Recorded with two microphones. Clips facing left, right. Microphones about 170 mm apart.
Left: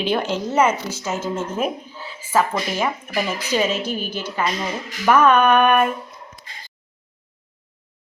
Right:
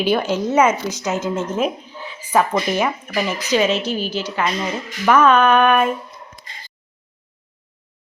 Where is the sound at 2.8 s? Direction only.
5° left (ahead or behind).